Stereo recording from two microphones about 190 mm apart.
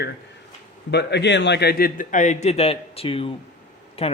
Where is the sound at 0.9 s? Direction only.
65° left (ahead or behind); by 4.1 s 30° left (ahead or behind).